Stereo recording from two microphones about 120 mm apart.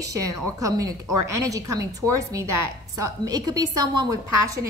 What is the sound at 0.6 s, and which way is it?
A woman's voice, 30° right (ahead or behind).